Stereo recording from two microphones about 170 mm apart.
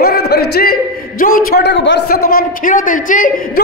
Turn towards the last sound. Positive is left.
turn(degrees=55)  # may be behind; listen again after turning